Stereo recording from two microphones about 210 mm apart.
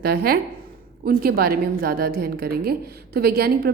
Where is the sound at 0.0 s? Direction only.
50° right (ahead or behind).